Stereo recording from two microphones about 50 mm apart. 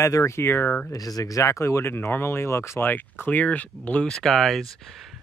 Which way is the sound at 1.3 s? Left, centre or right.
Left.